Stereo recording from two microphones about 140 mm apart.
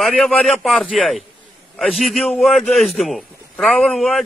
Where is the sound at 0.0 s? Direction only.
Centre (ahead or behind).